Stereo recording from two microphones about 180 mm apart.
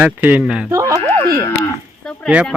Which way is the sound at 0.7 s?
20° right (ahead or behind).